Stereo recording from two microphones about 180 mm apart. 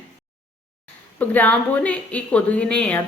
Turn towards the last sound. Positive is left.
turn(degrees=5)  # may be behind; listen again after turning